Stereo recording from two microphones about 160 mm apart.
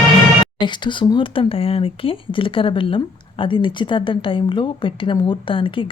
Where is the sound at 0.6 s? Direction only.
30° left (ahead or behind).